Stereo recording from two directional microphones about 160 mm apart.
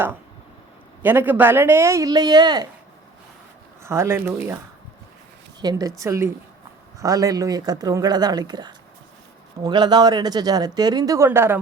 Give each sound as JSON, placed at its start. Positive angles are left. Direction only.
{"t": 1.0, "sound": "speech", "side_deg": -10}
{"t": 3.8, "sound": "speech", "side_deg": -15}
{"t": 5.5, "sound": "speech", "side_deg": -20}